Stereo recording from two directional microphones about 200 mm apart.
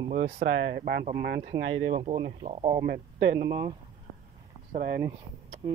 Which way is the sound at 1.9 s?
30° right (ahead or behind).